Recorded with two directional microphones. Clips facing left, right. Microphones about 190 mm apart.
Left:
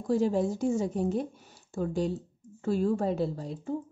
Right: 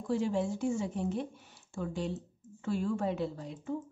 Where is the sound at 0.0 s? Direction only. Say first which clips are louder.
Left 5 dB; 40° left (ahead or behind).